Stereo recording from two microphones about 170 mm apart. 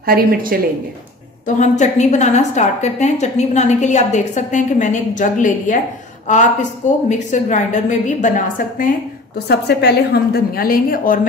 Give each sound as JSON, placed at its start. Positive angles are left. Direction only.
{"t": 0.0, "sound": "a woman's voice", "side_deg": -60}
{"t": 1.6, "sound": "a woman's voice", "side_deg": 45}
{"t": 9.5, "sound": "a woman's voice", "side_deg": 70}